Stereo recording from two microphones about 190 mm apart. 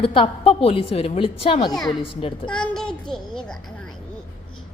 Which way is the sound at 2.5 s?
5° left (ahead or behind).